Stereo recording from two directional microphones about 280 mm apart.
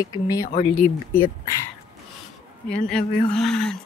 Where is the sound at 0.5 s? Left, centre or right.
Left.